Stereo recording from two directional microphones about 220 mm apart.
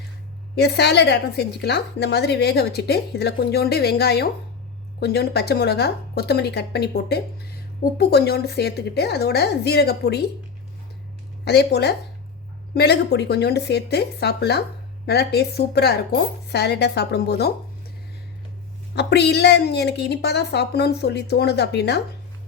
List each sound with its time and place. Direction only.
0.5 s a woman's voice: 50° left (ahead or behind)
11.4 s a woman's voice: 50° left (ahead or behind)
18.9 s a woman's voice: 50° left (ahead or behind)